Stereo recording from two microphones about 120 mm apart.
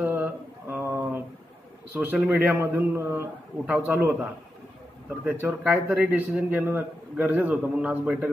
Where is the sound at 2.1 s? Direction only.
5° right (ahead or behind).